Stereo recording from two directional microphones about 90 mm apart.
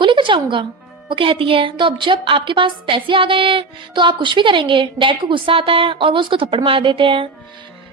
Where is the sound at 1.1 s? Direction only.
80° right.